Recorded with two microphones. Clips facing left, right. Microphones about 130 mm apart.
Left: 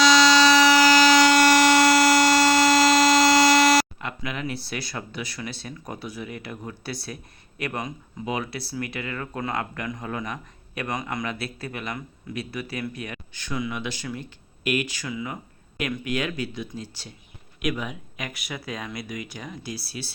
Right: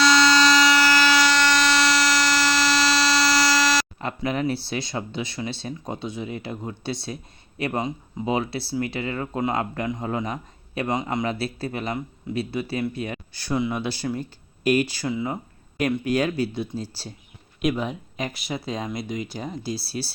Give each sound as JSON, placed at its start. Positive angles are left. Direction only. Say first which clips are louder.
{"t": 0.0, "sound": "fire alarm", "louder": "left 1 dB", "side_deg": 0}
{"t": 1.1, "sound": "a sound", "louder": "left 4 dB", "side_deg": 50}
{"t": 3.4, "sound": "buzzer", "louder": "left 4 dB", "side_deg": 50}
{"t": 3.9, "sound": "speech", "louder": "right 6 dB", "side_deg": -35}